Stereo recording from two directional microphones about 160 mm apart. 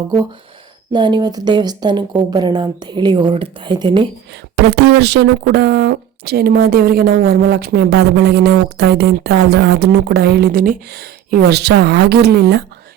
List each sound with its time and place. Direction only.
0.9 s a woman's voice: 30° right (ahead or behind)
4.5 s speech: 90° right